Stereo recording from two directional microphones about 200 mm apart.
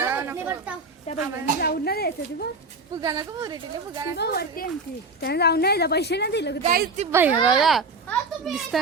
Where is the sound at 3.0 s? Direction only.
15° right (ahead or behind).